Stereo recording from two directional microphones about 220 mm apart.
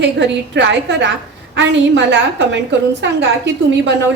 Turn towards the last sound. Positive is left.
turn(degrees=-50)  # may be behind; listen again after turning